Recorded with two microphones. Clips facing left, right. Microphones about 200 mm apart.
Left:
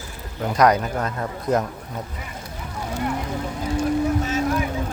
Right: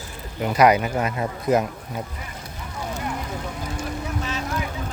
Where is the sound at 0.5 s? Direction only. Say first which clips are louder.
Right 1 dB; 5° right (ahead or behind).